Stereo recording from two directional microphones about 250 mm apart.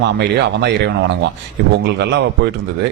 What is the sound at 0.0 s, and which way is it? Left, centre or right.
Speech, right.